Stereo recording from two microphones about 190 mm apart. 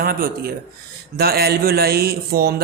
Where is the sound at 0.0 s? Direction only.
55° right (ahead or behind).